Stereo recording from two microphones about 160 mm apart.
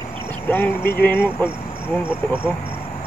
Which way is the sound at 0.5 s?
15° left (ahead or behind).